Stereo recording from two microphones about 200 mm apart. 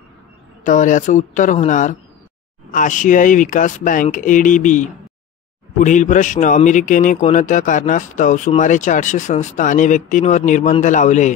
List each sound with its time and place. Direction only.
0.7 s a man's voice: 40° left (ahead or behind)